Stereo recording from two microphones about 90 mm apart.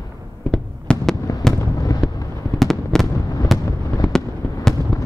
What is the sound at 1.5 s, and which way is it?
Fireworks, 45° left (ahead or behind).